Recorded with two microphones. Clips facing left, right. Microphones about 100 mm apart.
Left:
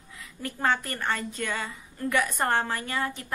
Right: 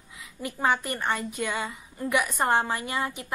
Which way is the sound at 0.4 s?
15° right (ahead or behind).